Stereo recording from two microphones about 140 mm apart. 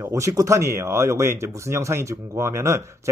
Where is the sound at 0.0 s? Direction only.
20° right (ahead or behind).